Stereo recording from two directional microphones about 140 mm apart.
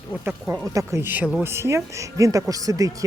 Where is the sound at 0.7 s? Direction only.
20° right (ahead or behind).